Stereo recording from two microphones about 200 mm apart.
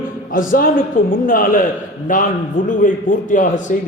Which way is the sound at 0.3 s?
45° left (ahead or behind).